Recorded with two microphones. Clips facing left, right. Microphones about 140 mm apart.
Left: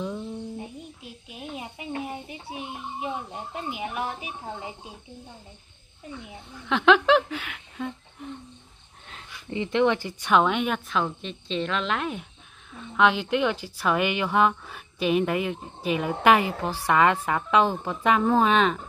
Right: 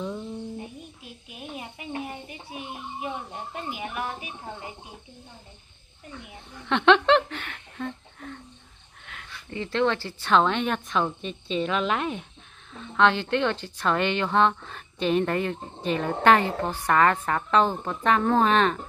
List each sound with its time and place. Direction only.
1.3 s snake: 20° left (ahead or behind)
2.0 s a sound: 20° left (ahead or behind)
3.6 s speech: 20° left (ahead or behind)
6.7 s speech: 5° left (ahead or behind)
9.5 s a woman's voice: 15° left (ahead or behind)